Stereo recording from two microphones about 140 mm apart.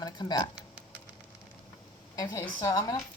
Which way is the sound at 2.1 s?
30° left (ahead or behind).